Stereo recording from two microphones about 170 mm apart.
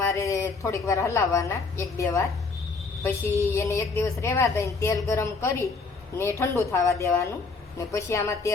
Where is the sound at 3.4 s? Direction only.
15° left (ahead or behind).